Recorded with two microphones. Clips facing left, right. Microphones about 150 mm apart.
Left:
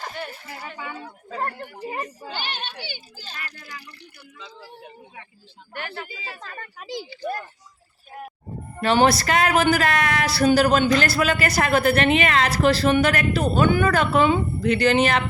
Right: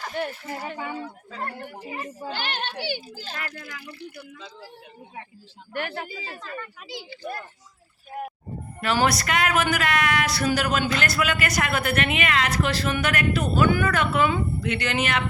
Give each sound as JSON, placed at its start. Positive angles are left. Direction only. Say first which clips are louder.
{"t": 0.2, "sound": "speech", "louder": "right 8 dB", "side_deg": -60}
{"t": 1.3, "sound": "speech", "louder": "left 7 dB", "side_deg": 45}
{"t": 1.5, "sound": "speech", "louder": "even", "side_deg": -45}
{"t": 1.8, "sound": "a woman's voice", "louder": "left 7 dB", "side_deg": 40}
{"t": 2.3, "sound": "a child's voice", "louder": "right 3 dB", "side_deg": -90}
{"t": 3.4, "sound": "speech", "louder": "right 3 dB", "side_deg": -55}
{"t": 5.7, "sound": "speech", "louder": "right 3 dB", "side_deg": -55}
{"t": 6.4, "sound": "speech", "louder": "right 2 dB", "side_deg": 45}
{"t": 8.8, "sound": "a woman's voice", "louder": "left 5 dB", "side_deg": 30}